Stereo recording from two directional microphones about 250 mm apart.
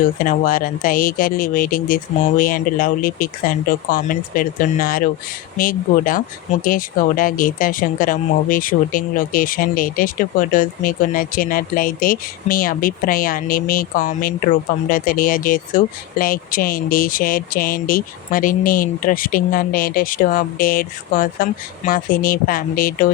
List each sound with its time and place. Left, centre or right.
0.3 s speech: left